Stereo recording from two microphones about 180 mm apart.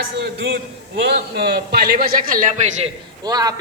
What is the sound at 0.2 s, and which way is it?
A man's voice, 65° right (ahead or behind).